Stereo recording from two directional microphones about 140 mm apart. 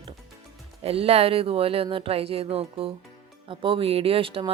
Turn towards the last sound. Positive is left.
turn(degrees=-40)  # may be behind; listen again after turning